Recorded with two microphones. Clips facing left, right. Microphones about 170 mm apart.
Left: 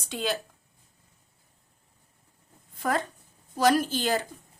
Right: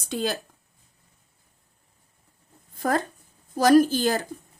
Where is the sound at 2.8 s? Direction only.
40° right (ahead or behind).